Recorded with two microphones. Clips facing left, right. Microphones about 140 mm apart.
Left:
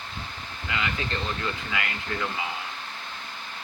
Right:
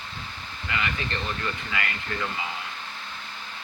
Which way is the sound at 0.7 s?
20° left (ahead or behind).